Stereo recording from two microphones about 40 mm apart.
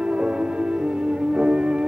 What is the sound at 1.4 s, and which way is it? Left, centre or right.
Music, right.